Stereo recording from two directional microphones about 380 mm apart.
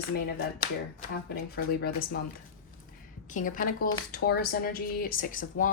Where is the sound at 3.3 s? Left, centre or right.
Left.